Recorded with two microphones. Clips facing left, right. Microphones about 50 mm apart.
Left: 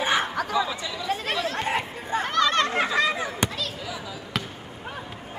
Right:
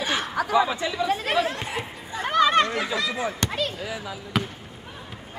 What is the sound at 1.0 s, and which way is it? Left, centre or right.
Speech, centre.